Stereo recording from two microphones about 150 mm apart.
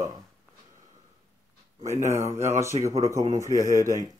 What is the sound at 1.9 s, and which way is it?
Speech, 20° right (ahead or behind).